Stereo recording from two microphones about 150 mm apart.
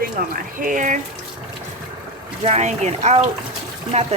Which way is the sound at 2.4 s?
50° right (ahead or behind).